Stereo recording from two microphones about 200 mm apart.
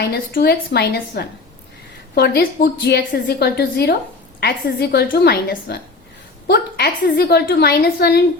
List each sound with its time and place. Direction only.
0.0 s a woman's voice: 50° left (ahead or behind)